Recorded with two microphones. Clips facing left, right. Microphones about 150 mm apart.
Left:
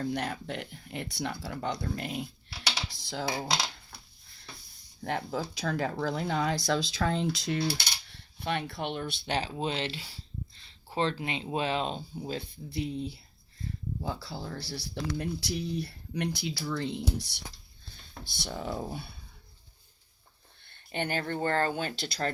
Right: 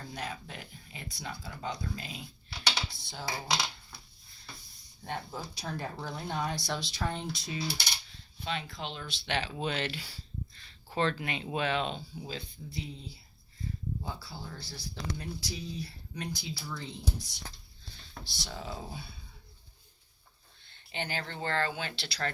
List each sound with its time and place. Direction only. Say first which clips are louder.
0.0 s speech: left 8 dB; 65° left (ahead or behind)
3.0 s speech: left 7 dB; 90° left
5.0 s speech: left 6 dB; 90° left; by 9.2 s 55° left (ahead or behind)
9.2 s speech: left 1 dB; 35° left (ahead or behind)
12.4 s speech: left 6 dB; 65° left (ahead or behind)
14.0 s speech: left 5 dB; 75° left (ahead or behind)
18.3 s speech: left 6 dB; 50° left (ahead or behind)
20.7 s speech: left 5 dB; 55° left (ahead or behind)